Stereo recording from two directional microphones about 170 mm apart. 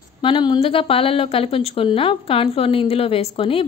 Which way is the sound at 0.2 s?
30° left (ahead or behind).